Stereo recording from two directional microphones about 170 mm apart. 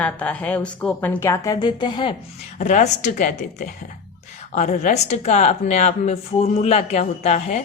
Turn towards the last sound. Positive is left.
turn(degrees=40)  # may be behind; listen again after turning